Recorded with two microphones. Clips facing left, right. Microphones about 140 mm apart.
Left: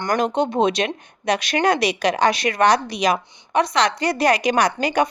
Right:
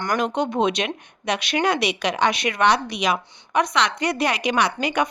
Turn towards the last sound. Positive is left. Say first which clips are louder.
# left 3 dB
turn(degrees=35)  # may be behind; listen again after turning